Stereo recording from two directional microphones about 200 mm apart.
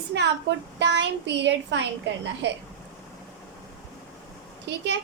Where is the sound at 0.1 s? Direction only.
60° right (ahead or behind).